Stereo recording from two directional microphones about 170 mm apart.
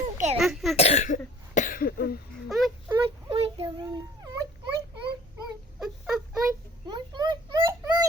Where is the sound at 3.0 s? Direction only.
35° right (ahead or behind).